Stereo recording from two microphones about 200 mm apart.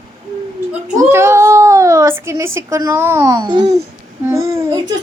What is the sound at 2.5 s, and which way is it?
A child's voice, 15° right (ahead or behind).